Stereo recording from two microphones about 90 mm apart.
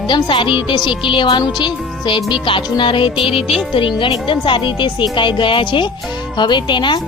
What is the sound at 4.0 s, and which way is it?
Speech, 65° left (ahead or behind).